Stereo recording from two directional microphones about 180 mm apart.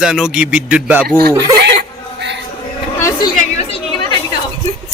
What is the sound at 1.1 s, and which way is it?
Speech, 60° right (ahead or behind).